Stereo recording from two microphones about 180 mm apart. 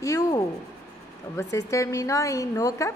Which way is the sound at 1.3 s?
15° left (ahead or behind).